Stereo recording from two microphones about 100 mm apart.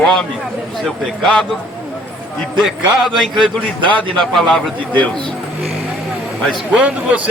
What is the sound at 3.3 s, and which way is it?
Speech, 55° right (ahead or behind).